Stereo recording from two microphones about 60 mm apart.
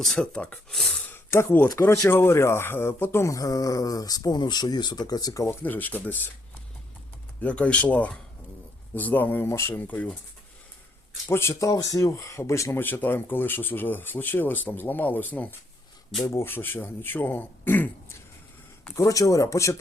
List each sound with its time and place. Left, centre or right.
0.0 s speech: centre
0.3 s speech: centre
1.1 s speech: left
3.3 s speech: left
5.5 s speech: left
7.4 s speech: left
9.5 s speech: left
9.7 s speech: left
11.3 s speech: left
11.7 s speech: left
12.7 s speech: left
16.2 s speech: left
16.5 s speech: left
18.9 s speech: left